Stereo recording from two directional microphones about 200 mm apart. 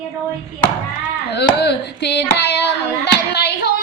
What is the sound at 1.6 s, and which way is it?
A woman's voice, 55° left (ahead or behind).